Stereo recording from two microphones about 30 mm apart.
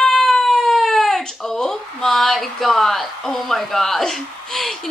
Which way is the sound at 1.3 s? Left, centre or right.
Centre.